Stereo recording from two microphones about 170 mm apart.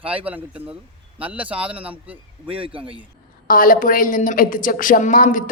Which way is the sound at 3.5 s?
55° left (ahead or behind).